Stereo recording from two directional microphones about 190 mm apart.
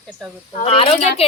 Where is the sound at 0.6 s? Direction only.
30° left (ahead or behind).